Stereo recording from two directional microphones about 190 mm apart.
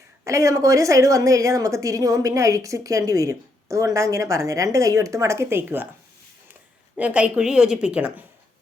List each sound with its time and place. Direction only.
0.3 s a woman's voice: 15° right (ahead or behind)